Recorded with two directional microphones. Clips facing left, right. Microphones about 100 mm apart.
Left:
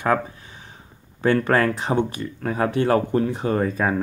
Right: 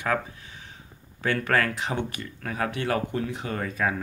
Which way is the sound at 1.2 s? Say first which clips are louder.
Left 6 dB; 35° left (ahead or behind).